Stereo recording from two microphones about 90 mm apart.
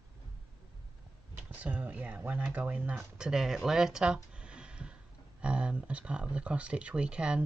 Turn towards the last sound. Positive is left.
turn(degrees=-10)  # may be behind; listen again after turning